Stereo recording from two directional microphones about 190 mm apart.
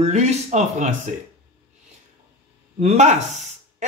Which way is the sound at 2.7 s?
35° right (ahead or behind).